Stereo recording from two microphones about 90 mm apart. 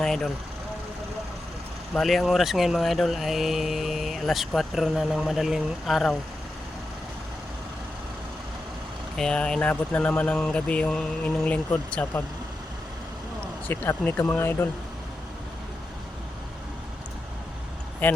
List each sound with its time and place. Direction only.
0.0 s vehicle: 5° left (ahead or behind)
1.9 s speech: centre (ahead or behind)
9.1 s speech: 5° left (ahead or behind)
13.7 s speech: 25° left (ahead or behind)
18.0 s speech: 20° left (ahead or behind)